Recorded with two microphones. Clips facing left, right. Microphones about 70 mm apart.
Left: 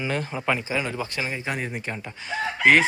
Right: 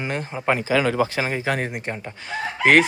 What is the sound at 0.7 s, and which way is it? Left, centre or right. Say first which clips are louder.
Speech: right 8 dB; right.